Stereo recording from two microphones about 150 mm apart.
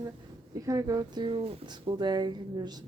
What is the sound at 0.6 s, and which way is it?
Speech, 20° right (ahead or behind).